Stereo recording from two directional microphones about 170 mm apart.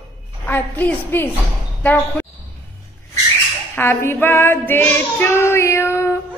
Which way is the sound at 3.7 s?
15° left (ahead or behind).